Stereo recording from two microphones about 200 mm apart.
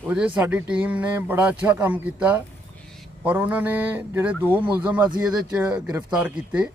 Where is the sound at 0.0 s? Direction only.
5° right (ahead or behind).